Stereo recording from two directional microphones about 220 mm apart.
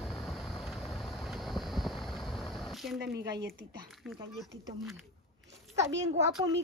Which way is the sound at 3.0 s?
50° right (ahead or behind).